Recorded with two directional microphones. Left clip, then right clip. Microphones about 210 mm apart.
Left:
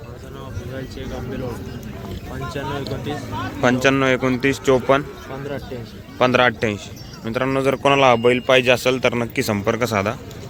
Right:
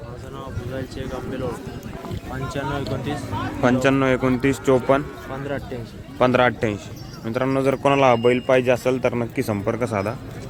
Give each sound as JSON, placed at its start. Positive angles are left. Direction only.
{"t": 2.3, "sound": "speech", "side_deg": -20}
{"t": 3.6, "sound": "a man's voice", "side_deg": 0}
{"t": 6.1, "sound": "a man's voice", "side_deg": -5}